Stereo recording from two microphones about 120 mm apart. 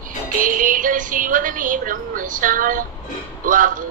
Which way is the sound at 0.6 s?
90° right.